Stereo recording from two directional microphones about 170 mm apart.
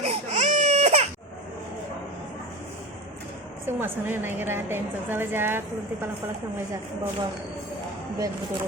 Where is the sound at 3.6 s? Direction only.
10° right (ahead or behind).